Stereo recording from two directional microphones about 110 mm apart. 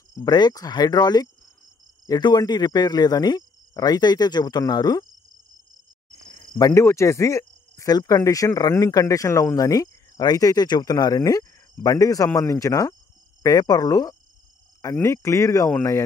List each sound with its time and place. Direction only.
0.1 s speech: 40° left (ahead or behind)
6.3 s cricket: 35° left (ahead or behind)
6.7 s speech: 25° left (ahead or behind)